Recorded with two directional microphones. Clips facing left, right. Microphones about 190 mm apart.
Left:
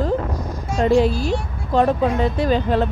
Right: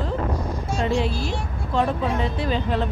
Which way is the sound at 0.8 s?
40° left (ahead or behind).